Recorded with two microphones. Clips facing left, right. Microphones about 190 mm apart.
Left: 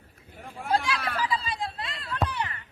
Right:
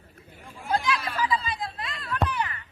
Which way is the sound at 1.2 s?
35° left (ahead or behind).